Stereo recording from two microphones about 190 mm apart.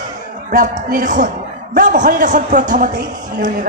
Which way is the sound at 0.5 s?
45° right (ahead or behind).